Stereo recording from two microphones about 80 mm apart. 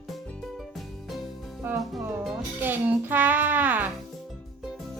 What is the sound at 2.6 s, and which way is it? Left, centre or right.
Music, right.